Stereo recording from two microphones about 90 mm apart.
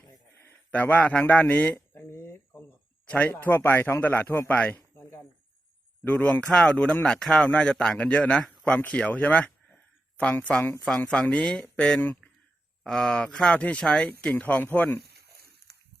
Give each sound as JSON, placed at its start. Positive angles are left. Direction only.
{"t": 0.3, "sound": "a sound", "side_deg": 20}
{"t": 3.1, "sound": "speech", "side_deg": 15}
{"t": 4.4, "sound": "a sound", "side_deg": 20}
{"t": 6.1, "sound": "speech", "side_deg": 20}
{"t": 6.4, "sound": "speech", "side_deg": 10}
{"t": 12.8, "sound": "speech", "side_deg": 10}